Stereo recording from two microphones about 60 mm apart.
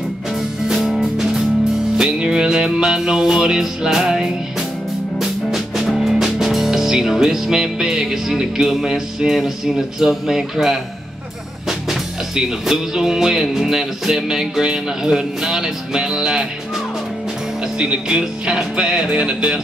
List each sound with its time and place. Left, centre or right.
0.7 s music: centre
11.9 s music: centre
17.7 s music: centre